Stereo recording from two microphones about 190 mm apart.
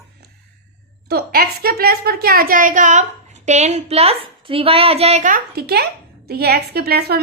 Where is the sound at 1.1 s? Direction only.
55° right (ahead or behind).